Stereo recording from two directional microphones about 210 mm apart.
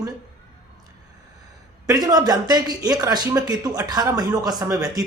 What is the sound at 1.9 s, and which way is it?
Speech, 20° right (ahead or behind).